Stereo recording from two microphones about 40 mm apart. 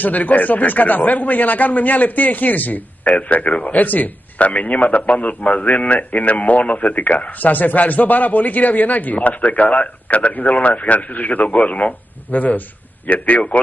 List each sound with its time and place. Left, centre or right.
0.0 s a man's voice: left